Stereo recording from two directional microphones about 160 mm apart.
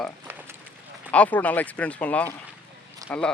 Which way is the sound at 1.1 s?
10° left (ahead or behind).